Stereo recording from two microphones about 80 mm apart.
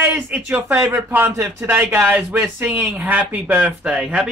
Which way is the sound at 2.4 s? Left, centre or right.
Centre.